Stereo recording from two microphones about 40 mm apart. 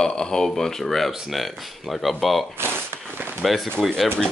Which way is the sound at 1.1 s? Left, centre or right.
Centre.